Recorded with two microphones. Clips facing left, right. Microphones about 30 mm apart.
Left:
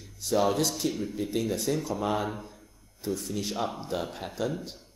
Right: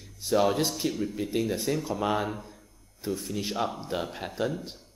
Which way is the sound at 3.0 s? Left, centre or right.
Centre.